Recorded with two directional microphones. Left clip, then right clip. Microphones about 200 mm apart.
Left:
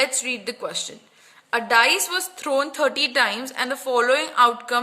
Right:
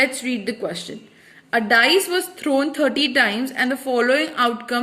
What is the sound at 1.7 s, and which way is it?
A woman's voice, 55° left (ahead or behind).